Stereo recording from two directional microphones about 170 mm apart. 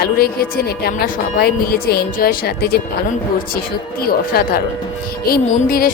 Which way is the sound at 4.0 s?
60° left (ahead or behind).